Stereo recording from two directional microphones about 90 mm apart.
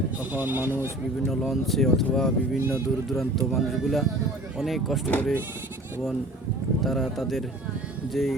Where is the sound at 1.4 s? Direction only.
Centre (ahead or behind).